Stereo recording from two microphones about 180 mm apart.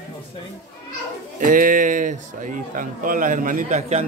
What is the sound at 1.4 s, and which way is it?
A man's voice, 50° right (ahead or behind).